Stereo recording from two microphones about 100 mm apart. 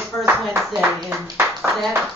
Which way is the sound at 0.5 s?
30° right (ahead or behind).